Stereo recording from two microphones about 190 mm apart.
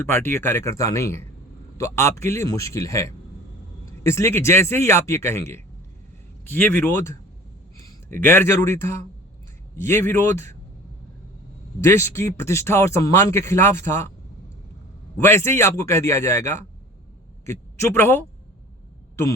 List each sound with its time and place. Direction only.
0.0 s speech: 10° left (ahead or behind)
11.8 s speech: 15° left (ahead or behind)
15.2 s a man's voice: 15° left (ahead or behind)